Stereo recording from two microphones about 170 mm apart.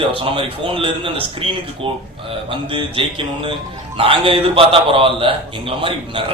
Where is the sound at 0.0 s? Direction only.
30° right (ahead or behind).